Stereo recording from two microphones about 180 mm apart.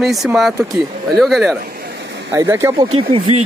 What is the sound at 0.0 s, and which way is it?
Speech, centre (ahead or behind).